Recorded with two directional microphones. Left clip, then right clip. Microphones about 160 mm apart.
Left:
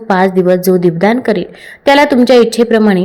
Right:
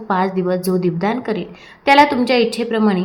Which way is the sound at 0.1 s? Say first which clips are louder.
Left 8 dB; 35° left (ahead or behind).